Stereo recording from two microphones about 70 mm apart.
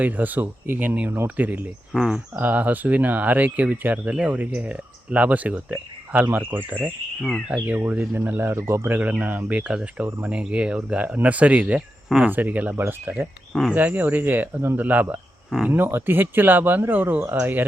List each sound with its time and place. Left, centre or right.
0.0 s speech: right
1.9 s speech: centre
2.4 s speech: right
7.2 s cricket: centre
7.8 s speech: right
9.0 s speech: right
12.7 s speech: right
15.4 s speech: centre
15.7 s speech: right